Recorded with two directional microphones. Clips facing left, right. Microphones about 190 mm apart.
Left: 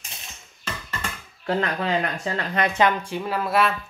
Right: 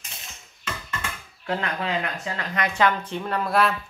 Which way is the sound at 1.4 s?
35° left (ahead or behind).